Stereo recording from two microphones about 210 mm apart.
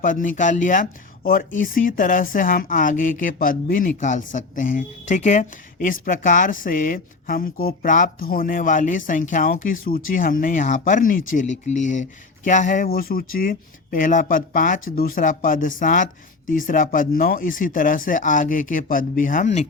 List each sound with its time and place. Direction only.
0.0 s a woman's voice: 40° left (ahead or behind)